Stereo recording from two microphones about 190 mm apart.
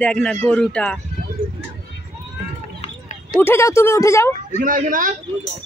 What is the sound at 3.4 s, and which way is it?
Speech, 15° left (ahead or behind).